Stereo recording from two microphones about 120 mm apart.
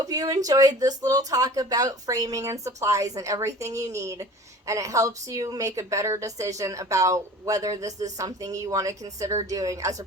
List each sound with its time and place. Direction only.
0.0 s speech: 30° right (ahead or behind)